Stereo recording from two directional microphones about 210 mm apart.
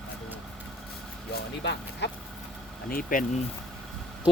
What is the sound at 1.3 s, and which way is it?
Speech, 55° left (ahead or behind).